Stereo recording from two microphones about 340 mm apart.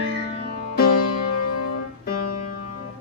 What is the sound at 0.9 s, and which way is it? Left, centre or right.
Music, left.